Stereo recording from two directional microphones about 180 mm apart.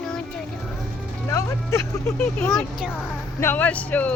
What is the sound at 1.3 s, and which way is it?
Speech, 15° left (ahead or behind).